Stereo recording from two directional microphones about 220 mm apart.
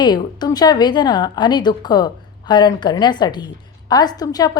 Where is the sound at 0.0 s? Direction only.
20° left (ahead or behind).